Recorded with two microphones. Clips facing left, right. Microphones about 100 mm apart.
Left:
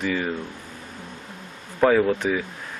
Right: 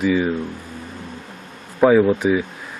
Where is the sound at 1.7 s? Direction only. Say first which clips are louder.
Right 5 dB; 10° right (ahead or behind).